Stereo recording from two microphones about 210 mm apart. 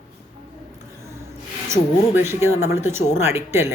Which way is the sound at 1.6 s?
10° right (ahead or behind).